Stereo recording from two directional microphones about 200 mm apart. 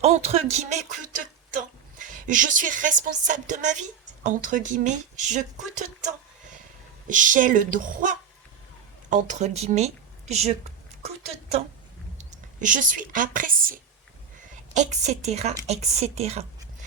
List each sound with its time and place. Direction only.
0.0 s speech: 30° right (ahead or behind)
11.0 s a sound: 30° right (ahead or behind)
12.1 s a woman's voice: 40° right (ahead or behind)